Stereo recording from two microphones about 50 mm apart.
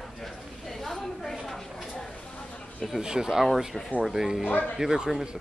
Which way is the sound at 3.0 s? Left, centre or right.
Centre.